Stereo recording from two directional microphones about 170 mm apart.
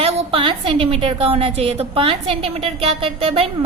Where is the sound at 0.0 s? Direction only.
35° right (ahead or behind).